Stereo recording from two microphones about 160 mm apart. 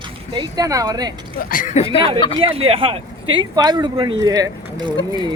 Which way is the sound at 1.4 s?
60° left (ahead or behind).